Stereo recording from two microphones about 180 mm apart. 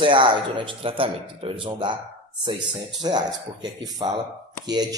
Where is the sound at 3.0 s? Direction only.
25° right (ahead or behind).